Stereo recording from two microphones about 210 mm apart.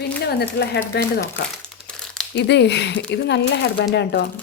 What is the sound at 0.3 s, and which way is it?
Speech, 50° left (ahead or behind).